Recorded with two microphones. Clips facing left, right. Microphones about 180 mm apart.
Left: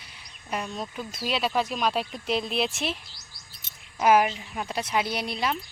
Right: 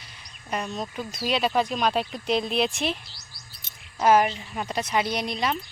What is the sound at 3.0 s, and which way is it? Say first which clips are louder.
Chirp: right 2 dB; 50° left (ahead or behind).